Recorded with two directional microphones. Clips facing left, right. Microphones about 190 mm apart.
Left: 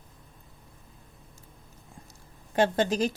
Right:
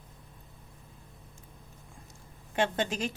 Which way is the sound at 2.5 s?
40° left (ahead or behind).